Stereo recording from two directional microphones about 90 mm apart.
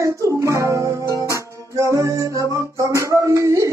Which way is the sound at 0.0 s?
35° right (ahead or behind).